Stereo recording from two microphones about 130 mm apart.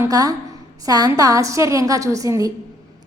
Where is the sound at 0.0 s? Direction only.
25° right (ahead or behind).